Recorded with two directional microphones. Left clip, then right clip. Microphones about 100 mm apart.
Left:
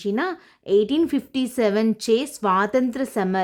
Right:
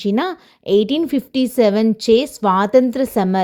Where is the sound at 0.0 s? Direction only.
50° right (ahead or behind).